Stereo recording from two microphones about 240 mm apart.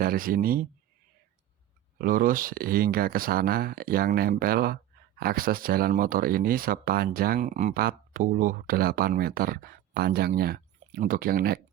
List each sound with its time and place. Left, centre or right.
0.0 s speech: right
2.0 s speech: right